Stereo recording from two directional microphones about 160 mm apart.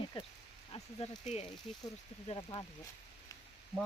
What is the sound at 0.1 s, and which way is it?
Speech, 35° left (ahead or behind).